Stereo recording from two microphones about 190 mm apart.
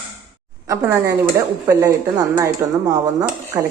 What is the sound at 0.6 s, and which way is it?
Speech, 15° right (ahead or behind).